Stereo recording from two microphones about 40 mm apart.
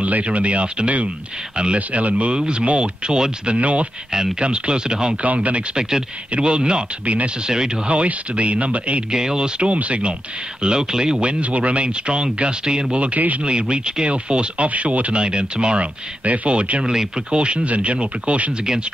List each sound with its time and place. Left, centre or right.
0.0 s speech: right
2.3 s speech: right
5.2 s speech: right
5.8 s speech: centre; by 9.0 s right
9.1 s speech: centre
10.6 s speech: centre
11.1 s speech: right
12.9 s speech: right
15.2 s speech: right
16.8 s speech: centre